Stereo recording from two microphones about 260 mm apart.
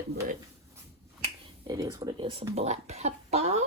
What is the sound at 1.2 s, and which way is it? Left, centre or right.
Speech, centre.